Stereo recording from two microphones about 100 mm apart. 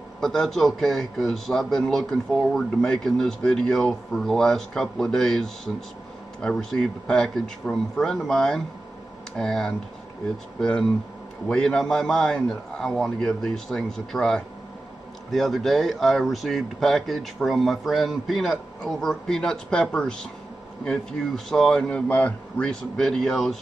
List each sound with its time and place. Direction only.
0.2 s a man's voice: 5° left (ahead or behind)
21.5 s a man's voice: 5° left (ahead or behind)